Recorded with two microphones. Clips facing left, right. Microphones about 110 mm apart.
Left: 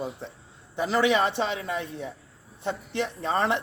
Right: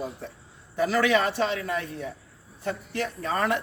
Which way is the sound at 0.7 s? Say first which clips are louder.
Right 1 dB; 25° left (ahead or behind).